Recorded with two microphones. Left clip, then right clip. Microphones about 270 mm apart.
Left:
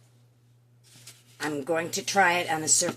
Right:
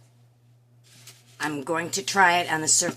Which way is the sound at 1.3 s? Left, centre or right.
Centre.